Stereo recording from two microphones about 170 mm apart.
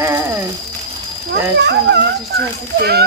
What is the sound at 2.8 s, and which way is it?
Speech, 70° right (ahead or behind).